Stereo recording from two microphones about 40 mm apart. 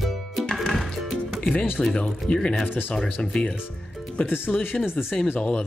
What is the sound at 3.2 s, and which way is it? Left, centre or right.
Speech, centre.